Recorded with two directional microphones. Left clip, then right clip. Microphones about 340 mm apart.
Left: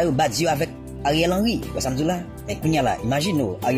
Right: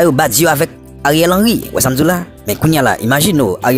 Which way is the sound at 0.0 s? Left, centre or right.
Right.